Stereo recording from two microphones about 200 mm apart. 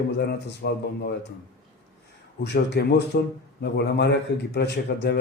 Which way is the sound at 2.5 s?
60° left (ahead or behind).